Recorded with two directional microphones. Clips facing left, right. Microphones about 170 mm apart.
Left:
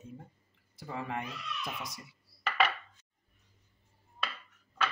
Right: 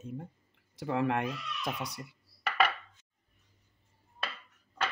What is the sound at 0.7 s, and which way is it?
Speech, 70° right (ahead or behind).